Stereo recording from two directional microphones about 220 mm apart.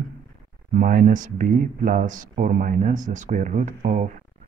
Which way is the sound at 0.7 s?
40° right (ahead or behind).